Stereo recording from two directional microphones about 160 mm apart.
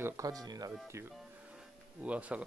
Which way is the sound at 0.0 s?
20° right (ahead or behind).